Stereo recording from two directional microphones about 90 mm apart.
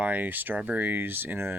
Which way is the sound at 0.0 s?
15° right (ahead or behind).